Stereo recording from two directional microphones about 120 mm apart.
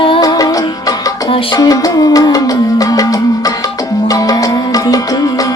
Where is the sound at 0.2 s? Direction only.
30° left (ahead or behind).